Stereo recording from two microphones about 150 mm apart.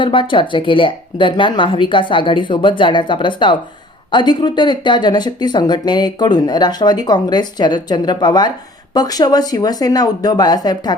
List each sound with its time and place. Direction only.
0.0 s speech: 35° left (ahead or behind)